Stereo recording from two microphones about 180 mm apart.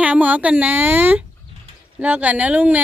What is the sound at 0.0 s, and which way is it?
A woman's voice, 10° right (ahead or behind).